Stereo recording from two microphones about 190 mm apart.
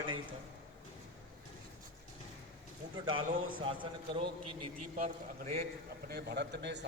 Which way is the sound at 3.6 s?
25° right (ahead or behind).